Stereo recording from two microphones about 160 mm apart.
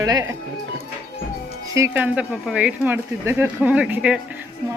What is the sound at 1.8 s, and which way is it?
Speech, 15° right (ahead or behind).